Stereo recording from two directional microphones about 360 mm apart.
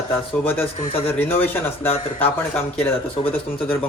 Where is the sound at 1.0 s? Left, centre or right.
Centre.